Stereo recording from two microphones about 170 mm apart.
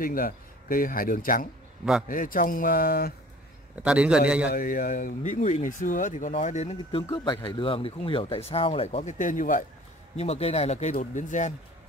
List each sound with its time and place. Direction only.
0.0 s speech: 55° left (ahead or behind)
3.8 s a man's voice: 5° right (ahead or behind)
4.6 s speech: 55° left (ahead or behind)
6.8 s speech: 30° left (ahead or behind); by 9.7 s 50° left (ahead or behind)
10.1 s speech: 40° left (ahead or behind)